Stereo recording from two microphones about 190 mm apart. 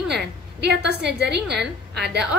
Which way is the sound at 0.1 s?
60° right (ahead or behind).